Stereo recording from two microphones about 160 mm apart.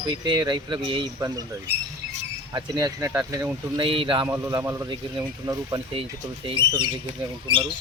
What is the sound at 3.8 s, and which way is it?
Speech, 35° right (ahead or behind).